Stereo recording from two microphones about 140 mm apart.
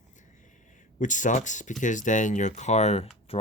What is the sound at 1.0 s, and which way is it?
Speech, 65° left (ahead or behind).